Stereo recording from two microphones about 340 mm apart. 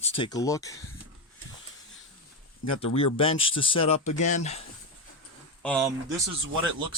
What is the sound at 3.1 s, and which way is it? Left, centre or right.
Speech, centre.